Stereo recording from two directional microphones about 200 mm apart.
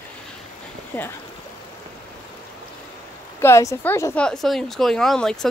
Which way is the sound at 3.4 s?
15° left (ahead or behind).